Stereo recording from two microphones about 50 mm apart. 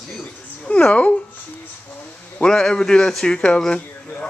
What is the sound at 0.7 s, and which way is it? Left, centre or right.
Speech, left.